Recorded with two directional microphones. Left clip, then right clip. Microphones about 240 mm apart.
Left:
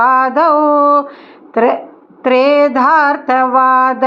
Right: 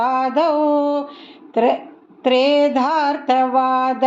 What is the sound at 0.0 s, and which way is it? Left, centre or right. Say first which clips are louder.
Mantra: left 7 dB; centre.